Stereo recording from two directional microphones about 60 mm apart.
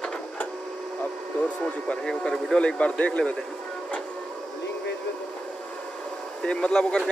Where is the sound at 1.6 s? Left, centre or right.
Centre.